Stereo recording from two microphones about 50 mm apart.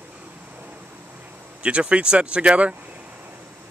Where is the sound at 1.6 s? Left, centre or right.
Right.